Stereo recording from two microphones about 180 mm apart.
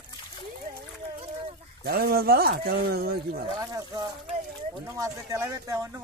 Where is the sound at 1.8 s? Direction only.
60° right (ahead or behind).